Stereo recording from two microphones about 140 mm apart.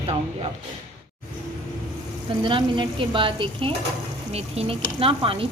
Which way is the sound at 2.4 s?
35° right (ahead or behind).